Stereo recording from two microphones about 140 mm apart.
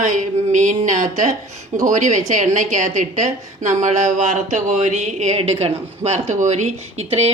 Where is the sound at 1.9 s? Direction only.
60° right (ahead or behind).